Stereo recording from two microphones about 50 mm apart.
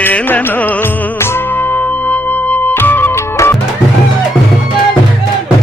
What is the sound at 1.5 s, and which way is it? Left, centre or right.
Music, left.